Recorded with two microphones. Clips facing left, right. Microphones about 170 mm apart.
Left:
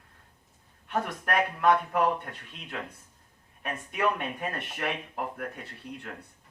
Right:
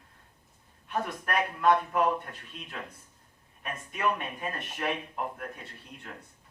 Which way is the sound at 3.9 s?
60° left (ahead or behind).